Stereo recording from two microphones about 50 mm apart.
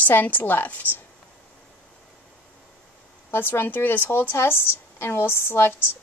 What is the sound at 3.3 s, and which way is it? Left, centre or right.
A woman's voice, left.